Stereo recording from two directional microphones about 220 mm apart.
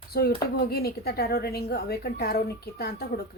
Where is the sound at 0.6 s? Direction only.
45° left (ahead or behind).